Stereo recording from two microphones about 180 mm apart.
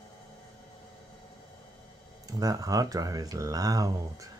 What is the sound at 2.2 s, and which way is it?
Speech, 20° right (ahead or behind).